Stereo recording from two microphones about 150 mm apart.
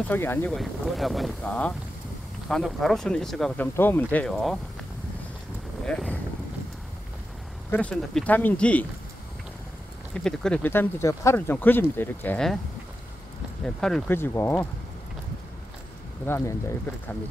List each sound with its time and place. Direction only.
0.1 s speech: 15° left (ahead or behind)
0.5 s speech: centre (ahead or behind)
3.5 s speech: 15° left (ahead or behind)
5.9 s speech: 5° left (ahead or behind)
7.7 s speech: 5° left (ahead or behind)
10.1 s speech: 5° left (ahead or behind)
13.7 s speech: 5° left (ahead or behind)
14.1 s speech: 15° left (ahead or behind)
16.3 s speech: 15° left (ahead or behind)